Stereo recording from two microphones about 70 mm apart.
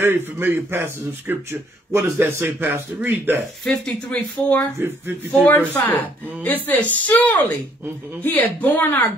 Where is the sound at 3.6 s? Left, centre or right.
Centre.